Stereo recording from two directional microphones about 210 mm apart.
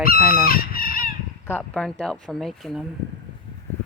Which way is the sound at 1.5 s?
10° left (ahead or behind).